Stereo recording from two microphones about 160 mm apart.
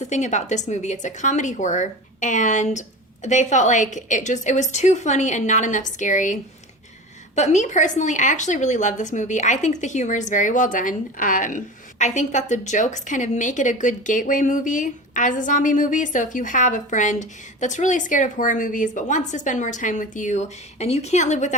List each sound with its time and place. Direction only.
0.0 s a woman's voice: 50° left (ahead or behind)